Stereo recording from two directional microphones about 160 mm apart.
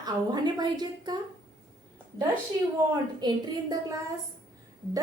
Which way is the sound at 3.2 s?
25° right (ahead or behind).